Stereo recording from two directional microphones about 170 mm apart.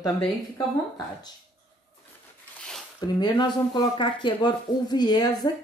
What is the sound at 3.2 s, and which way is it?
Speech, 25° left (ahead or behind).